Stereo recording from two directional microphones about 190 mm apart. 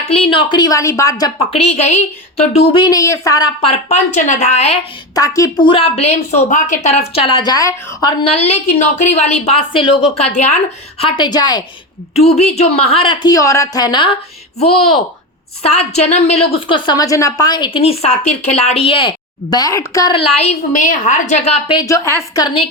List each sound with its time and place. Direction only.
0.1 s a woman's voice: 30° left (ahead or behind)
1.4 s a woman's voice: 30° left (ahead or behind)
3.8 s a woman's voice: 35° left (ahead or behind)
5.1 s a woman's voice: 15° left (ahead or behind)
8.2 s a woman's voice: 30° left (ahead or behind)
11.0 s a woman's voice: 20° left (ahead or behind)
12.1 s a woman's voice: 35° left (ahead or behind); by 20.1 s 15° left (ahead or behind)
20.1 s a woman's voice: 35° left (ahead or behind)
21.8 s a woman's voice: 15° left (ahead or behind)